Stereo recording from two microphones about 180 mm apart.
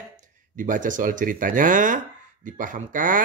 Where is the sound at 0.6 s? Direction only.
45° right (ahead or behind).